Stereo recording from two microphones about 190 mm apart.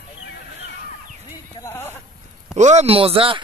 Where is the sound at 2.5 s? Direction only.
35° right (ahead or behind).